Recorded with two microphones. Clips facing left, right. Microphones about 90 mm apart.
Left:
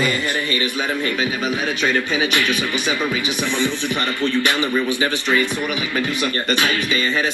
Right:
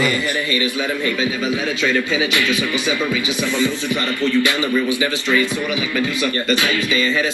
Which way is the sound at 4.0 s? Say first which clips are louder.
Right 3 dB; 20° left (ahead or behind).